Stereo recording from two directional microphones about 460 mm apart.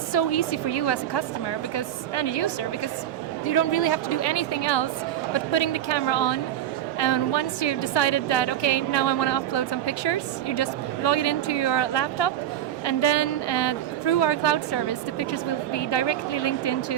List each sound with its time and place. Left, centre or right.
0.1 s a woman's voice: left
3.4 s a woman's voice: left